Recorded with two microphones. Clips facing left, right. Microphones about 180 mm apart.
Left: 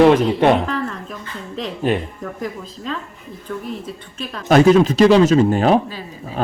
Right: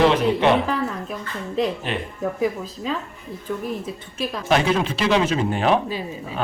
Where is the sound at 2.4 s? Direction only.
5° right (ahead or behind).